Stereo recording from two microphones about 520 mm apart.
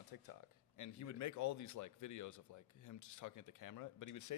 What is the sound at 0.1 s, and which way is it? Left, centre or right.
Speech, left.